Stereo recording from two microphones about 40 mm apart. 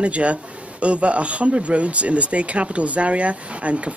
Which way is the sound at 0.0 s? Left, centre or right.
Right.